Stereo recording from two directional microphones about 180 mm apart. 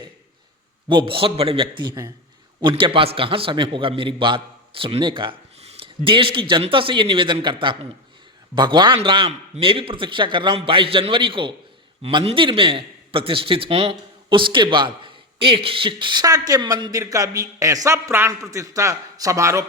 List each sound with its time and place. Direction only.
0.9 s a man's voice: 30° right (ahead or behind)